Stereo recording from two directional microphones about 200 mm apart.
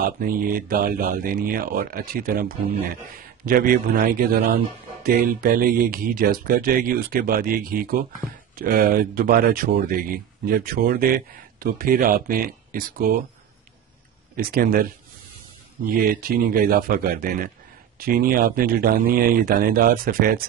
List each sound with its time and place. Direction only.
0.0 s speech: 45° right (ahead or behind)
14.3 s speech: 45° right (ahead or behind)
16.0 s speech: 45° right (ahead or behind)